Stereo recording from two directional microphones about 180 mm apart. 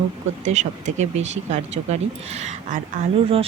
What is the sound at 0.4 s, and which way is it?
Speech, 40° right (ahead or behind).